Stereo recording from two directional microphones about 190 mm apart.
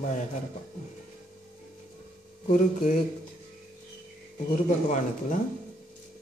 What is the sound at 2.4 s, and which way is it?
Speech, 45° left (ahead or behind).